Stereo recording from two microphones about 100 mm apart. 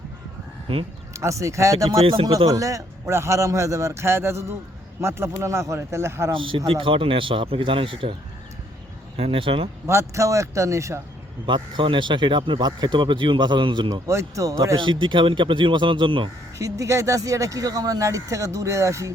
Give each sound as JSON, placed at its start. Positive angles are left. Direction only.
{"t": 1.1, "sound": "a man's voice", "side_deg": -30}
{"t": 6.3, "sound": "speech", "side_deg": -60}
{"t": 9.1, "sound": "speech", "side_deg": -75}
{"t": 9.8, "sound": "speech", "side_deg": -30}
{"t": 11.4, "sound": "speech", "side_deg": -55}
{"t": 13.9, "sound": "speech", "side_deg": -30}
{"t": 14.8, "sound": "speech", "side_deg": -55}
{"t": 16.6, "sound": "speech", "side_deg": -35}